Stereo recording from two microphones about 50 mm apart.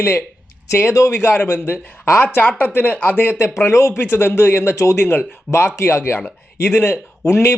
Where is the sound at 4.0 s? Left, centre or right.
Left.